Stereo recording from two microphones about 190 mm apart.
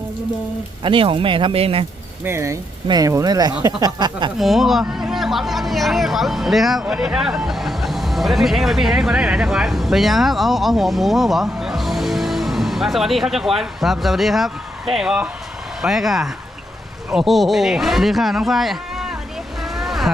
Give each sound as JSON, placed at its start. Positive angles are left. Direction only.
{"t": 0.9, "sound": "speech", "side_deg": -25}
{"t": 2.2, "sound": "speech", "side_deg": -15}
{"t": 4.4, "sound": "speech", "side_deg": 0}
{"t": 19.7, "sound": "vehicle", "side_deg": 0}